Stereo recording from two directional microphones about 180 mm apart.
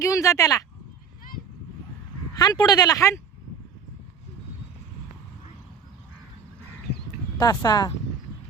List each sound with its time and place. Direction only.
0.0 s speech: 20° left (ahead or behind)
2.4 s speech: 20° left (ahead or behind)
7.3 s speech: 20° left (ahead or behind)